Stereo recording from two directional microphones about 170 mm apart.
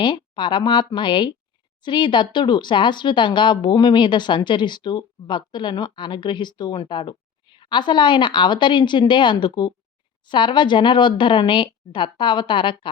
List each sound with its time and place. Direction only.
0.0 s speech: 25° left (ahead or behind)